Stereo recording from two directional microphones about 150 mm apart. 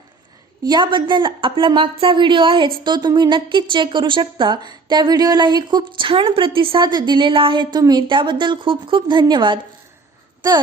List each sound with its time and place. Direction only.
0.6 s speech: 30° right (ahead or behind)